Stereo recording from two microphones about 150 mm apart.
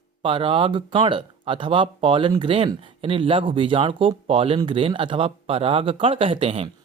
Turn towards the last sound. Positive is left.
turn(degrees=-40)  # may be behind; listen again after turning